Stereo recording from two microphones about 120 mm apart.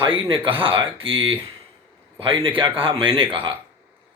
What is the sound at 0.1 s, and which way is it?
A man's voice, 45° right (ahead or behind).